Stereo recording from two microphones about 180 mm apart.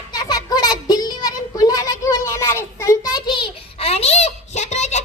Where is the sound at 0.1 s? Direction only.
20° left (ahead or behind).